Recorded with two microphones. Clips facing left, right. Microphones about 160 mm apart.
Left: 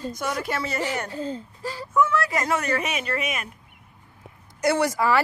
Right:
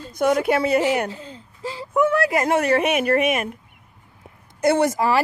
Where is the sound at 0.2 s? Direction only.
55° right (ahead or behind).